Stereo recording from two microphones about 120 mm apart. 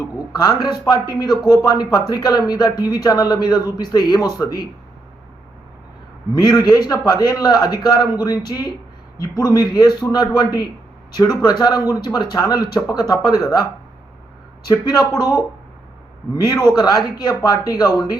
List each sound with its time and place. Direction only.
0.3 s speech: 35° left (ahead or behind)
6.3 s speech: 35° left (ahead or behind)
14.7 s speech: 30° left (ahead or behind)
16.7 s speech: 35° left (ahead or behind)